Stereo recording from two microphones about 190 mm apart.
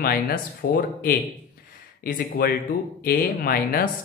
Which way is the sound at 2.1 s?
55° left (ahead or behind).